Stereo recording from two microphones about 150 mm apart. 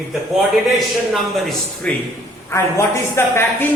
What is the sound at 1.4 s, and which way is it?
Speech, centre (ahead or behind).